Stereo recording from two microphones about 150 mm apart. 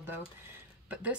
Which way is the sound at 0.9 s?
10° right (ahead or behind).